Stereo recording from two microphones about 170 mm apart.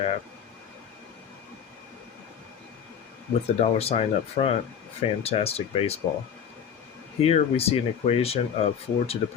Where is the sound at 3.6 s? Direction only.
35° left (ahead or behind).